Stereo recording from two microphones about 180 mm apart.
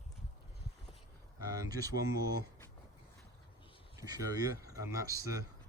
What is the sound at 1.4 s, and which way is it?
Speech, 20° right (ahead or behind).